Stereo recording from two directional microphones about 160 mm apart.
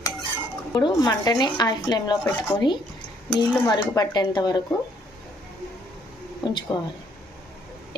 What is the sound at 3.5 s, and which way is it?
Speech, 25° left (ahead or behind).